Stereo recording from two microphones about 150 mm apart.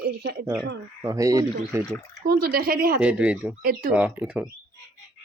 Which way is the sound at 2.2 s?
85° right.